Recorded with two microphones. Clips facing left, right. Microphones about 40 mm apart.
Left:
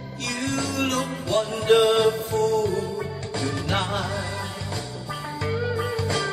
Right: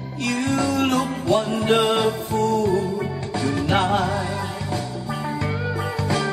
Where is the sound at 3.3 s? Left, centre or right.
Centre.